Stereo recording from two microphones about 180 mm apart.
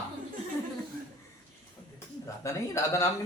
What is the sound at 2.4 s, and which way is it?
Speech, 15° left (ahead or behind).